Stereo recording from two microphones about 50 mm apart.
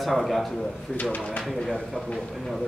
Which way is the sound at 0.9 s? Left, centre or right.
Left.